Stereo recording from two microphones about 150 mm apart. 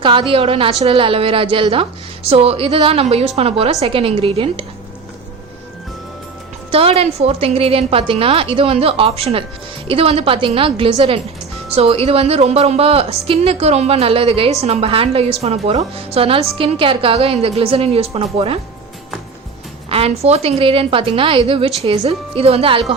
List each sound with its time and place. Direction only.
0.0 s a woman's voice: 35° right (ahead or behind)
6.7 s a woman's voice: 40° right (ahead or behind)
19.9 s a woman's voice: 40° right (ahead or behind)